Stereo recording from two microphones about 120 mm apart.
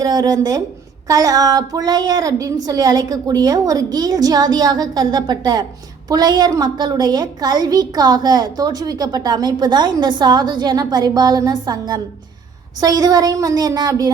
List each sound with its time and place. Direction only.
0.0 s a woman's voice: 35° right (ahead or behind)